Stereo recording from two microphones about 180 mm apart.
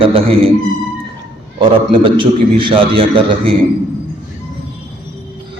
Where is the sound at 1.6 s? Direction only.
25° right (ahead or behind).